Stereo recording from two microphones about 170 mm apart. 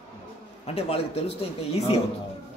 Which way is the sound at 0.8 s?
35° left (ahead or behind).